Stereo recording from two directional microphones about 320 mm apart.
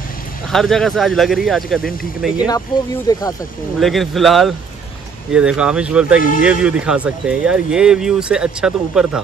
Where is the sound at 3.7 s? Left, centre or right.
Centre.